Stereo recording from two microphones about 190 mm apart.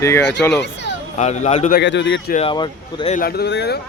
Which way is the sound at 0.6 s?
65° left (ahead or behind).